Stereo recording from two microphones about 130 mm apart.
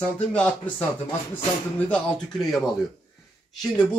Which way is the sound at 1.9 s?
5° left (ahead or behind).